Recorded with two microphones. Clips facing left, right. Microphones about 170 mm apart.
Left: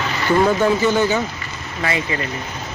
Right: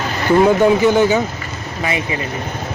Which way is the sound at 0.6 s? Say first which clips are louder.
Right 4 dB; 15° right (ahead or behind).